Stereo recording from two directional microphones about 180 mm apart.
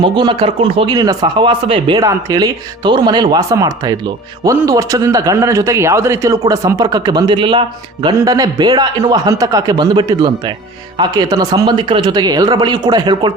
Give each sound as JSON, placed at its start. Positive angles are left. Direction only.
{"t": 0.0, "sound": "speech", "side_deg": -25}